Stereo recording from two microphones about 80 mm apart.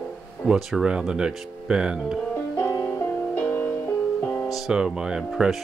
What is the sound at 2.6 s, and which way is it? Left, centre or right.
Music, left.